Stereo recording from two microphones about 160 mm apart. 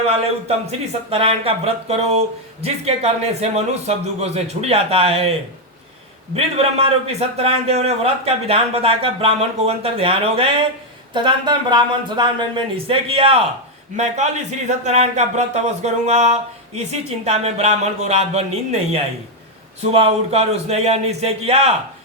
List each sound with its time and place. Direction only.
1.1 s a man's voice: 35° right (ahead or behind)
6.3 s a man's voice: 40° right (ahead or behind)
13.9 s speech: 45° right (ahead or behind)
19.8 s a man's voice: 40° right (ahead or behind)